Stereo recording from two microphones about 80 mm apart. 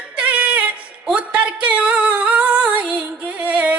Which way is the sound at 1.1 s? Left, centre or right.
Centre.